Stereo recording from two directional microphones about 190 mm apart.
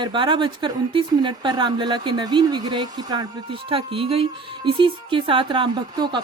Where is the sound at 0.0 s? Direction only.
25° right (ahead or behind).